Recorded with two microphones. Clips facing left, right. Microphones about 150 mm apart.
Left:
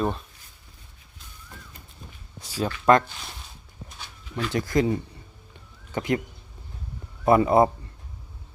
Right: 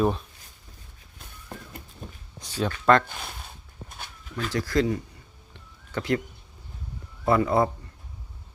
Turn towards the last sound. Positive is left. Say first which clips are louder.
# left 4 dB
turn(degrees=20)  # may be behind; listen again after turning